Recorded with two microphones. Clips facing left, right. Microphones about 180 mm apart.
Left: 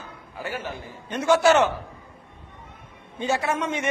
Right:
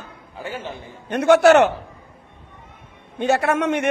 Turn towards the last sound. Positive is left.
turn(degrees=-65)  # may be behind; listen again after turning